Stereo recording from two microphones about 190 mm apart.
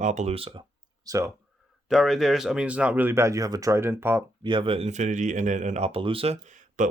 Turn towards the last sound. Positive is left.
turn(degrees=-40)  # may be behind; listen again after turning